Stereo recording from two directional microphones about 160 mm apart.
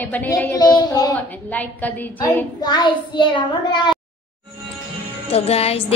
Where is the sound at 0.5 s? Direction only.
25° left (ahead or behind).